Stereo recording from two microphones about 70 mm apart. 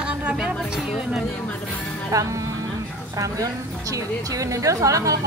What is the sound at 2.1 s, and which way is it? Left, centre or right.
A woman's voice, right.